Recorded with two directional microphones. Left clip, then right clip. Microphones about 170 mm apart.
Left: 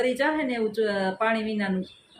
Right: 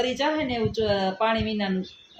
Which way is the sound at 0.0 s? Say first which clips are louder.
Even; 20° right (ahead or behind).